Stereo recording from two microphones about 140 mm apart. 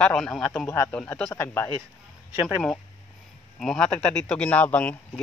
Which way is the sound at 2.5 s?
5° left (ahead or behind).